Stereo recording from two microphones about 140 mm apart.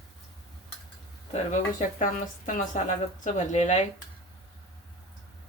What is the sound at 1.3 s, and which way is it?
A woman's voice, 60° left (ahead or behind).